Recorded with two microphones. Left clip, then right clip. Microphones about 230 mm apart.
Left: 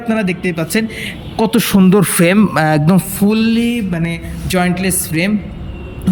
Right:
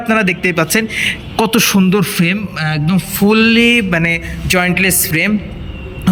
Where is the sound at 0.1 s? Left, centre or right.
Centre.